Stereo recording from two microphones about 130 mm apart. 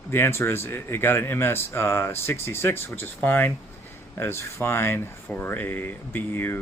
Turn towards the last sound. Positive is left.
turn(degrees=15)  # may be behind; listen again after turning